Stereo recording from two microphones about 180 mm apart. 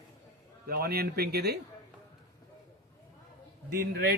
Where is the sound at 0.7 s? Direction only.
60° right (ahead or behind).